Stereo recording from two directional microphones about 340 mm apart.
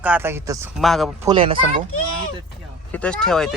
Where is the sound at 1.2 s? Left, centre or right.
Centre.